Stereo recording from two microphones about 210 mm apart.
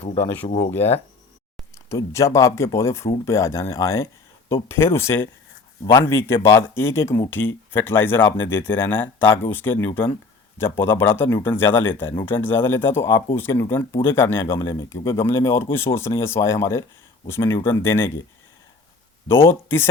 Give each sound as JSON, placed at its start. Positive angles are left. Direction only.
{"t": 0.0, "sound": "speech", "side_deg": 30}
{"t": 1.9, "sound": "speech", "side_deg": 15}
{"t": 19.3, "sound": "speech", "side_deg": 10}